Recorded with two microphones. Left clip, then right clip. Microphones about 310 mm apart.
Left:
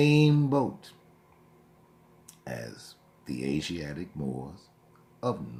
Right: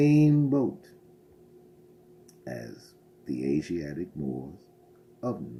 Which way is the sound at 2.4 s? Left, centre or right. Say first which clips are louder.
Even; centre.